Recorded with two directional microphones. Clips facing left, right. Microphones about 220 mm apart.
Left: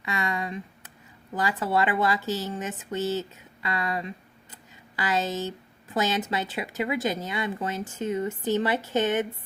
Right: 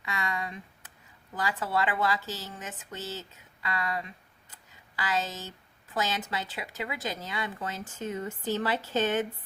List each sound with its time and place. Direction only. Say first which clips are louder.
0.0 s speech: left 4 dB; 20° left (ahead or behind)